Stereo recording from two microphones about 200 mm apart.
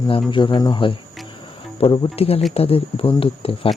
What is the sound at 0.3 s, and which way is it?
Speech, 25° left (ahead or behind).